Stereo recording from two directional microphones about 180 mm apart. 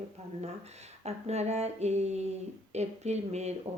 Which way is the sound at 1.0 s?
40° right (ahead or behind).